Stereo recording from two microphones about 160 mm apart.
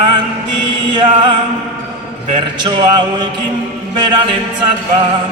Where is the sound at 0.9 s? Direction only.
30° right (ahead or behind).